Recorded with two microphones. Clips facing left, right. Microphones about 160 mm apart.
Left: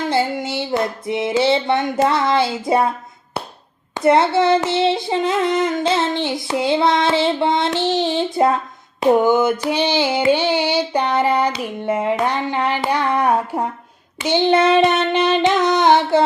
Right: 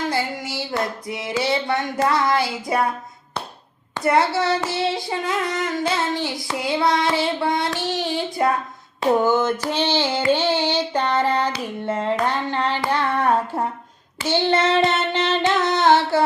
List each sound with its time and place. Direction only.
0.1 s child singing: 25° left (ahead or behind)
3.9 s child singing: 25° left (ahead or behind)
9.0 s female singing: 15° left (ahead or behind)